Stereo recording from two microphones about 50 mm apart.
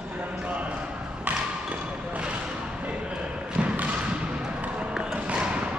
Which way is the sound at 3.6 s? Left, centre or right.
Right.